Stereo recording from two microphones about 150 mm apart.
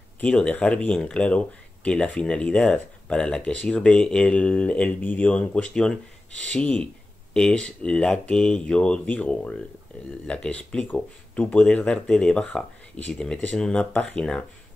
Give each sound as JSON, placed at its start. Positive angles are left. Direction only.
{"t": 0.2, "sound": "speech", "side_deg": 5}